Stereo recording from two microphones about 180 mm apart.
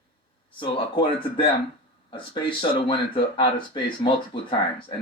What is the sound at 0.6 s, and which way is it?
Speech, 30° left (ahead or behind).